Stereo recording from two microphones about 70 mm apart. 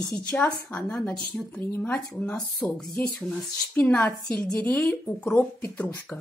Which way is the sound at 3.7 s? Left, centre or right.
Centre.